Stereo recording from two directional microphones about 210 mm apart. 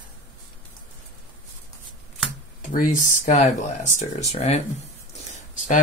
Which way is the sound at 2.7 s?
40° left (ahead or behind).